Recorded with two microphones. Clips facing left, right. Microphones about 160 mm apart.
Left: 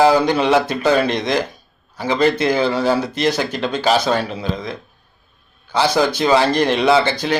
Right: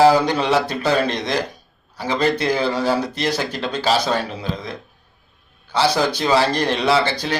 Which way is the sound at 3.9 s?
30° left (ahead or behind).